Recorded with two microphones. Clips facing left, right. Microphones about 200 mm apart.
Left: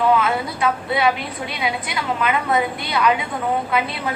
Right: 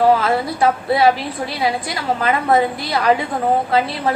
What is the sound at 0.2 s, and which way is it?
A woman's voice, 35° right (ahead or behind).